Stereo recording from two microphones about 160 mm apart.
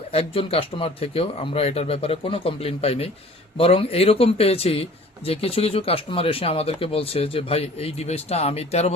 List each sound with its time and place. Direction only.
0.1 s speech: 40° left (ahead or behind)